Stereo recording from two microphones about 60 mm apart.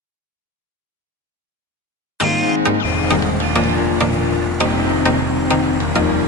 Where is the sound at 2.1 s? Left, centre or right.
Centre.